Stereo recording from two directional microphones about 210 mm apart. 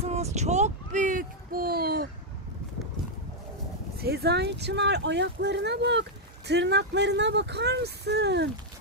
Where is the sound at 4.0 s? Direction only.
50° right (ahead or behind).